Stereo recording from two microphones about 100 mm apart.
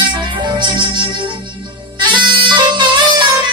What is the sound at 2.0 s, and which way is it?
Music, 50° right (ahead or behind).